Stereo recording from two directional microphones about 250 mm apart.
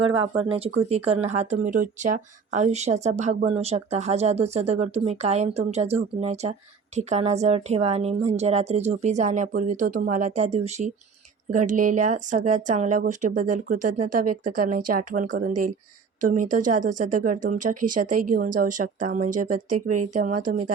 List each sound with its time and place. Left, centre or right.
0.2 s speech: right
19.7 s speech: right